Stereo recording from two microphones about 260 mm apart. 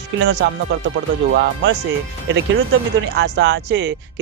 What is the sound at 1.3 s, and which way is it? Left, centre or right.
Speech, right.